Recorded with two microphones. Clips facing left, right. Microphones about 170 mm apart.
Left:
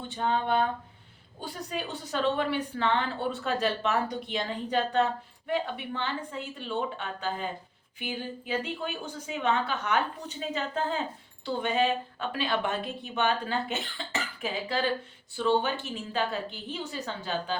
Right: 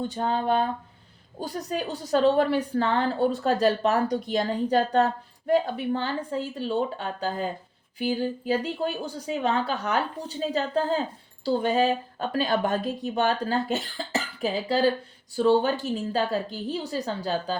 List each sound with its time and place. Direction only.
0.0 s a woman's voice: 40° right (ahead or behind)